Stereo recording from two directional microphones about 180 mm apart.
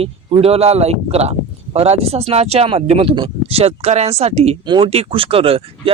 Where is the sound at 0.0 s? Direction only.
35° right (ahead or behind).